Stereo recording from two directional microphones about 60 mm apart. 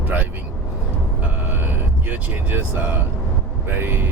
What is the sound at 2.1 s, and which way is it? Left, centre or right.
Speech, right.